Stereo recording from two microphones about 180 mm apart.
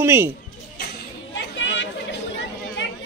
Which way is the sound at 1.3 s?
90° left.